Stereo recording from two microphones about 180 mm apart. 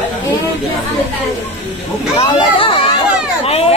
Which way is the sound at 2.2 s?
30° left (ahead or behind).